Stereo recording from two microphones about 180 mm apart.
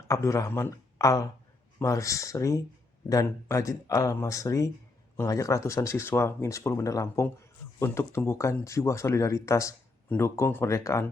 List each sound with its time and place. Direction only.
0.1 s speech: 15° left (ahead or behind)